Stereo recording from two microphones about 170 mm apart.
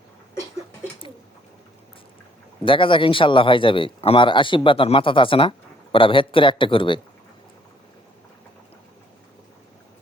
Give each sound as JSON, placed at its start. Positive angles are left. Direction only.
{"t": 2.6, "sound": "speech", "side_deg": 30}